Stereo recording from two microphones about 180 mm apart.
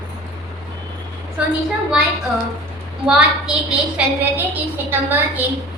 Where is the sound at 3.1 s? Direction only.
5° right (ahead or behind).